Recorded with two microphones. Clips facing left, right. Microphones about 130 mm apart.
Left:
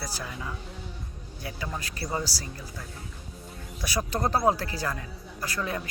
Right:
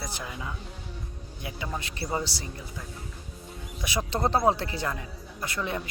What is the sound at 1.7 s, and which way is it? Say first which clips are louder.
Speech: right 2 dB; 25° right (ahead or behind).